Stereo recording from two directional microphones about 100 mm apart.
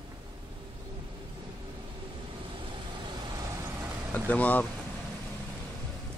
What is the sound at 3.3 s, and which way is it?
Vehicle, 35° right (ahead or behind).